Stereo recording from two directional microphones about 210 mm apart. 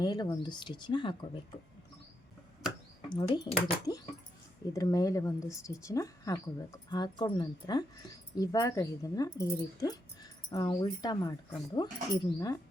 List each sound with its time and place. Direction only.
0.0 s speech: 20° left (ahead or behind)
3.1 s speech: 20° left (ahead or behind)